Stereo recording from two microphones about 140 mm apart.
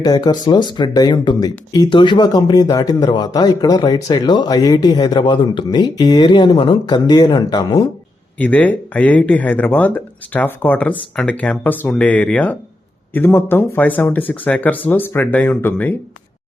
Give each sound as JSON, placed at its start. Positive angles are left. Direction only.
{"t": 0.0, "sound": "speech", "side_deg": 30}
{"t": 8.4, "sound": "speech", "side_deg": 10}